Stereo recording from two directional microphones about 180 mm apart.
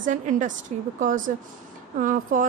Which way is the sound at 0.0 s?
45° right (ahead or behind).